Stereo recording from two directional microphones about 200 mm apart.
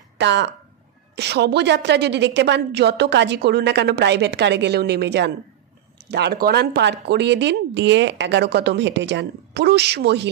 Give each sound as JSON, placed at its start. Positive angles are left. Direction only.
{"t": 0.2, "sound": "speech", "side_deg": -60}